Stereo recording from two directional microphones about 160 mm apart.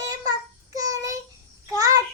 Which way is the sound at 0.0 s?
20° right (ahead or behind).